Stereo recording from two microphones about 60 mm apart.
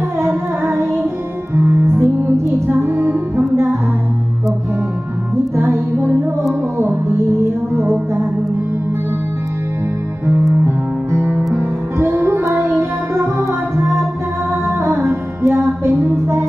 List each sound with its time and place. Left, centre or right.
0.2 s music: right
5.6 s music: right
10.6 s music: right
15.4 s music: right